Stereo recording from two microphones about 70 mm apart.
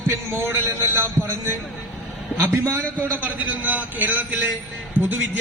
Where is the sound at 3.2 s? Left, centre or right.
Right.